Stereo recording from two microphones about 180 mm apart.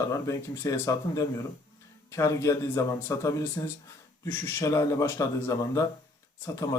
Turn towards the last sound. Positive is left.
turn(degrees=15)  # may be behind; listen again after turning